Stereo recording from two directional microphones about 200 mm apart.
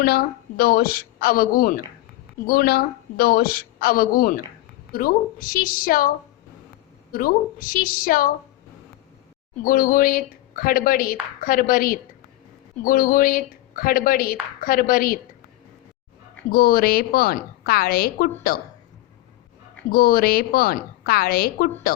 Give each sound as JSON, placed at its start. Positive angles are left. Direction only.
{"t": 0.0, "sound": "speech", "side_deg": 50}
{"t": 7.1, "sound": "speech", "side_deg": 45}
{"t": 9.6, "sound": "speech", "side_deg": 45}
{"t": 16.5, "sound": "speech", "side_deg": 50}
{"t": 19.9, "sound": "speech", "side_deg": 50}